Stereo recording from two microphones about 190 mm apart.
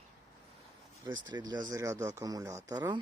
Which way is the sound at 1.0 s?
20° right (ahead or behind).